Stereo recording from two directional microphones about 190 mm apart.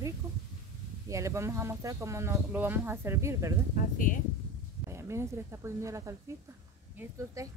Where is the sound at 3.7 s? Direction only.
45° left (ahead or behind).